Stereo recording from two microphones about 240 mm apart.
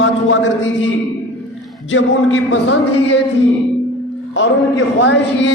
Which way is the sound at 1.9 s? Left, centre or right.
Left.